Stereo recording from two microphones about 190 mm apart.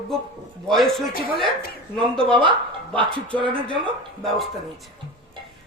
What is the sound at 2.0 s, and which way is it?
Speech, 25° right (ahead or behind).